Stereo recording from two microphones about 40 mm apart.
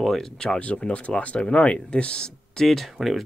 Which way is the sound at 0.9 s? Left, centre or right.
Left.